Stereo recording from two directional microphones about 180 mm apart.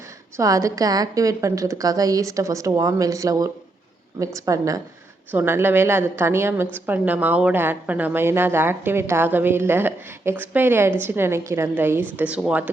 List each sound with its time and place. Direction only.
0.3 s a woman's voice: 20° right (ahead or behind)